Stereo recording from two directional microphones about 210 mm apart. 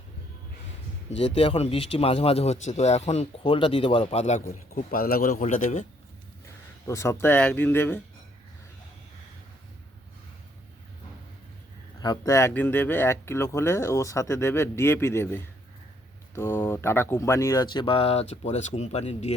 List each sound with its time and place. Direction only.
1.4 s a man's voice: 30° left (ahead or behind)
4.7 s speech: 45° left (ahead or behind)
6.8 s speech: 15° left (ahead or behind)
11.9 s a man's voice: 20° left (ahead or behind)